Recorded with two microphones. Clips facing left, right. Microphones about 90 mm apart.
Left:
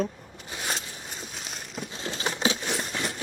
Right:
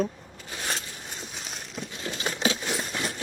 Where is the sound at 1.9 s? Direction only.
30° left (ahead or behind).